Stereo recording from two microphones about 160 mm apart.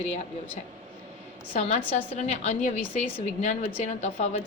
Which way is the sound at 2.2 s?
45° left (ahead or behind).